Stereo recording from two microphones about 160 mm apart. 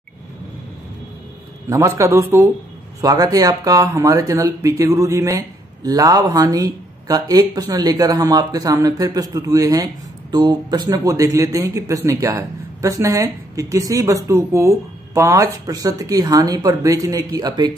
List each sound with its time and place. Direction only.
1.7 s speech: 20° right (ahead or behind)